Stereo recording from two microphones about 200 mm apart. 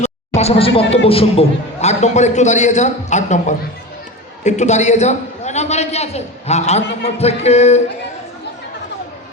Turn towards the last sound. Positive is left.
turn(degrees=35)  # may be behind; listen again after turning